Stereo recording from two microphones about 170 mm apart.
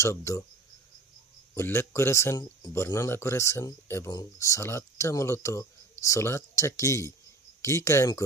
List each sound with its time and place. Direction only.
0.0 s a man's voice: 15° left (ahead or behind)
1.5 s a man's voice: 15° left (ahead or behind)